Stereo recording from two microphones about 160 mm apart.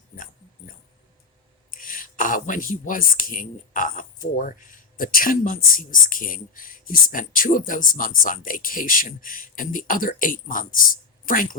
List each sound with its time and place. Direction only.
1.7 s speech: 60° left (ahead or behind)